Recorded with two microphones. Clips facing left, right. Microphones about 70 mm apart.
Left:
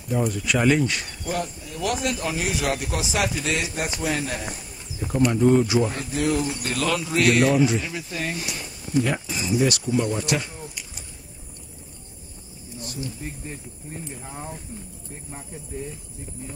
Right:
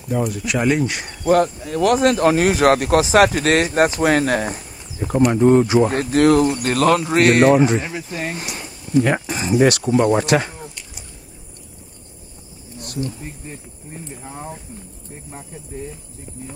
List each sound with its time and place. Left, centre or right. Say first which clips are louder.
0.4 s speech: right 1 dB; centre
1.2 s speech: right 15 dB; right
4.5 s a sound: right 6 dB; right
5.3 s speech: right 5 dB; right
5.9 s speech: right 10 dB; right
6.5 s speech: right 9 dB; right
7.9 s speech: right 3 dB; right
9.0 s speech: right 6 dB; right
9.7 s speech: right 8 dB; right
12.8 s a sound: right 7 dB; right
13.2 s speech: right 1 dB; centre